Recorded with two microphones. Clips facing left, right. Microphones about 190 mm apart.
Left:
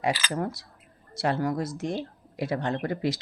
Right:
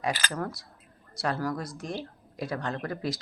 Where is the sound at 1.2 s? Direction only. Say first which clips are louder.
Left 4 dB; 20° left (ahead or behind).